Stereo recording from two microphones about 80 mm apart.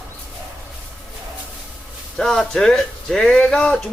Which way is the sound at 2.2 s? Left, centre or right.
Centre.